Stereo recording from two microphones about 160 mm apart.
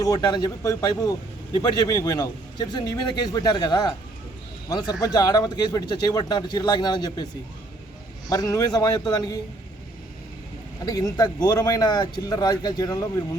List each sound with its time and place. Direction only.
0.0 s a man's voice: 25° left (ahead or behind)
8.3 s a man's voice: 20° left (ahead or behind)
10.8 s a man's voice: 25° left (ahead or behind)